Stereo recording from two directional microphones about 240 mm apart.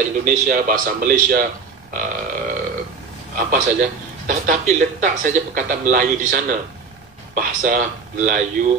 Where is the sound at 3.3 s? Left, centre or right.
Right.